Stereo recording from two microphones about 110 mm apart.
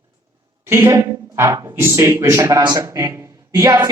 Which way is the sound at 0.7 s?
25° right (ahead or behind).